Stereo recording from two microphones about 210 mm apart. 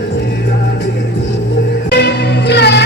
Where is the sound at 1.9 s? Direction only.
50° left (ahead or behind).